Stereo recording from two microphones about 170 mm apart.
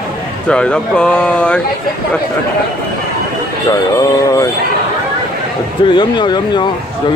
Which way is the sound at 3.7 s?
20° left (ahead or behind).